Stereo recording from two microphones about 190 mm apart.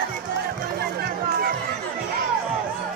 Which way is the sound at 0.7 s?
55° right (ahead or behind).